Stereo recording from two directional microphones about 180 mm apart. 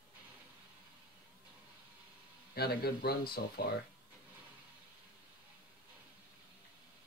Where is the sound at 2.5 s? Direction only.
60° left (ahead or behind).